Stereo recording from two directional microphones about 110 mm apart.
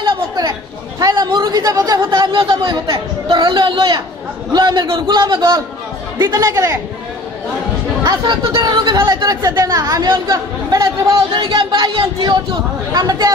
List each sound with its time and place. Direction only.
0.0 s speech: 40° right (ahead or behind)
6.3 s speech: 30° right (ahead or behind)
8.6 s speech: 40° right (ahead or behind)
11.3 s speech: 45° right (ahead or behind)